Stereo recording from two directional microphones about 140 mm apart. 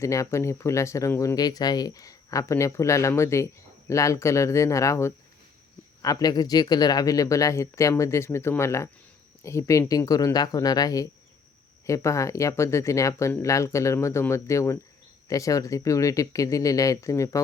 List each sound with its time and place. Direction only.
0.0 s speech: 20° left (ahead or behind)